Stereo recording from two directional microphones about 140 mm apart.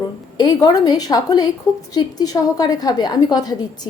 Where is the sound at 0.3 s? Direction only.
30° left (ahead or behind).